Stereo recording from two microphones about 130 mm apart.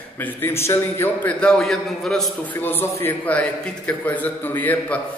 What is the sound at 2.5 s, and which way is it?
A man's voice, 15° left (ahead or behind).